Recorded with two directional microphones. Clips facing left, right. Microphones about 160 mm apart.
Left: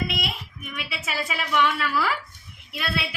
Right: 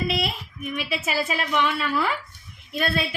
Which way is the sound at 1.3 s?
30° right (ahead or behind).